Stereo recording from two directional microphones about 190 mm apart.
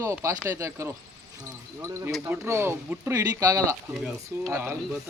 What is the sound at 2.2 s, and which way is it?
Speech, 10° right (ahead or behind).